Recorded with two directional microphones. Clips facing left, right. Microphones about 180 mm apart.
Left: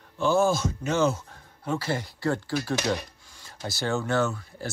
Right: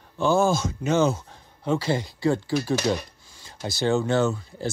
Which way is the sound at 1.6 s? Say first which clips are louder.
Right 4 dB; 20° right (ahead or behind).